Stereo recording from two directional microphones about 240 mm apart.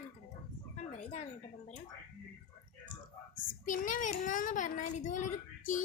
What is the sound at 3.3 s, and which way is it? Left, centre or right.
A child's voice, left.